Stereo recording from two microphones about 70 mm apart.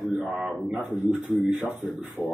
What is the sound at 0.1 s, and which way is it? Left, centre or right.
Speech, centre.